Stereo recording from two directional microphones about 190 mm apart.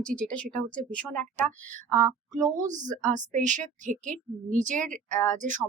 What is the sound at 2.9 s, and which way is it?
A woman's voice, 40° right (ahead or behind).